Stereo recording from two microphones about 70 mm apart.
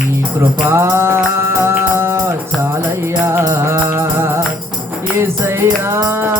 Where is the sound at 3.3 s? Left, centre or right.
Right.